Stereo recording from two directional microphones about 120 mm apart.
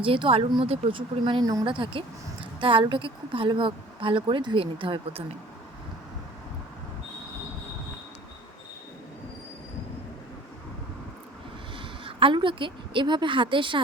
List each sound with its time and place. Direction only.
0.0 s a woman's voice: 45° right (ahead or behind)
11.8 s a woman's voice: 45° right (ahead or behind)